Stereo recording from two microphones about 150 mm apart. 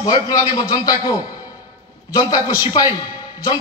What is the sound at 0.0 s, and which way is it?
A man's voice, 25° left (ahead or behind).